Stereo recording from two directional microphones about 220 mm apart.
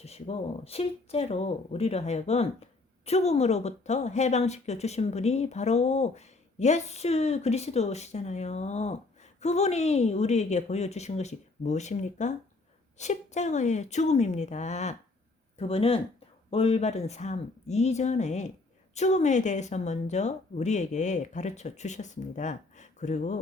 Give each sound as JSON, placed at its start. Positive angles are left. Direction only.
{"t": 0.0, "sound": "speech", "side_deg": 30}